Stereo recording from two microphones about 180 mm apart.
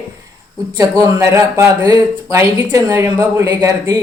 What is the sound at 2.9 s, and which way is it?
Speech, 15° right (ahead or behind).